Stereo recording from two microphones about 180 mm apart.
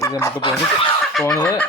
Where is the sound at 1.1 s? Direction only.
5° left (ahead or behind).